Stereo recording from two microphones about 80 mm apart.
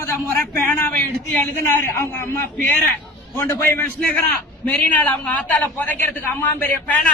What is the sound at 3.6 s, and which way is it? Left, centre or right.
Speech, left.